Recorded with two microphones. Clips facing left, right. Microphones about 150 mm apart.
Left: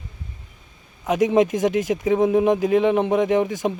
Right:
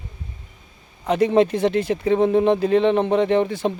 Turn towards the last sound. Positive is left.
turn(degrees=15)  # may be behind; listen again after turning